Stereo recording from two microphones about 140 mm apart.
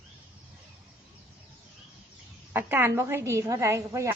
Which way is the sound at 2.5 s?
15° right (ahead or behind).